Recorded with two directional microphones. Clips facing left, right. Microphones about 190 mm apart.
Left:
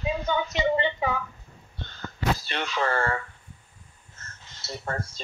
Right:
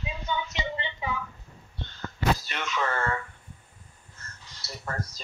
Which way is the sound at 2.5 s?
30° left (ahead or behind).